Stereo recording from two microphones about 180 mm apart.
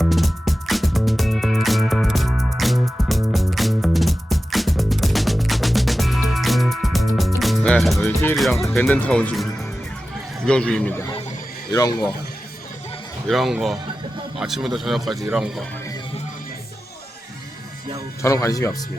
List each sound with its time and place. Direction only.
0.0 s music: centre (ahead or behind)
8.4 s a man's voice: centre (ahead or behind); by 12.0 s 20° left (ahead or behind)
13.2 s a man's voice: centre (ahead or behind)
18.2 s speech: 15° left (ahead or behind)